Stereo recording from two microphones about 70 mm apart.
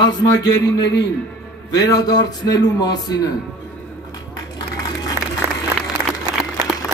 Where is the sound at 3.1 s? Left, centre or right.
Left.